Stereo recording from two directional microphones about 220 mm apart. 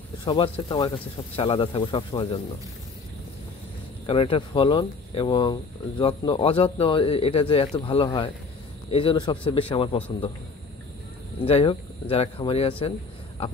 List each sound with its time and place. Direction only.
0.2 s speech: 20° left (ahead or behind)
4.0 s speech: 25° left (ahead or behind)
11.4 s speech: 25° left (ahead or behind)